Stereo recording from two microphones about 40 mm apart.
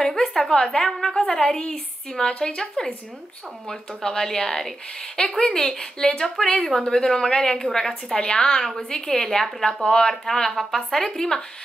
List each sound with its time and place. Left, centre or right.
0.0 s a sound: centre
0.5 s a woman's voice: centre
0.8 s a woman's voice: centre
1.1 s a woman's voice: centre
10.5 s a woman's voice: centre